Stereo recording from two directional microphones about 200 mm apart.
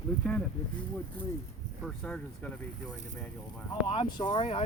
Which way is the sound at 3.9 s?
25° left (ahead or behind).